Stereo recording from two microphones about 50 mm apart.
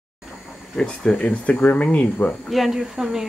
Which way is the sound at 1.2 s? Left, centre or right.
Left.